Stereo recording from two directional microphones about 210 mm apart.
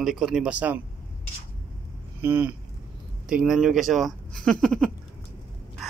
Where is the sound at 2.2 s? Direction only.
10° right (ahead or behind).